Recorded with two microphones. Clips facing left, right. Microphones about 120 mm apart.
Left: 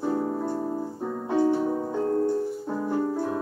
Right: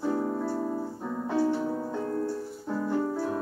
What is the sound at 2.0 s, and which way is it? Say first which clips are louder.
Music: left 9 dB; 35° left (ahead or behind).